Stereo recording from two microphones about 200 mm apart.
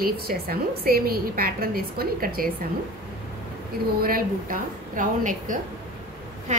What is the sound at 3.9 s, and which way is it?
A woman's voice, 45° right (ahead or behind).